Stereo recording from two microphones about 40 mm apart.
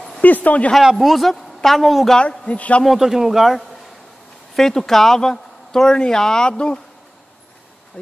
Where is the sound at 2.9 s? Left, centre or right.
Centre.